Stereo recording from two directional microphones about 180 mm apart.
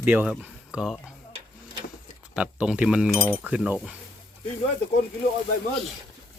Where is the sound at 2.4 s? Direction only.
5° right (ahead or behind).